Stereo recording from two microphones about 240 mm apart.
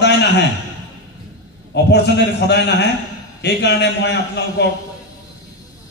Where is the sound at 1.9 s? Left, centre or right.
Left.